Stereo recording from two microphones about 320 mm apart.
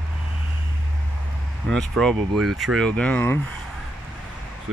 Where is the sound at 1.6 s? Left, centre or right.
Centre.